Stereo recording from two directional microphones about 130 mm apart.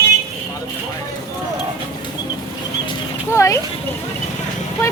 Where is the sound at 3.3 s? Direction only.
20° left (ahead or behind).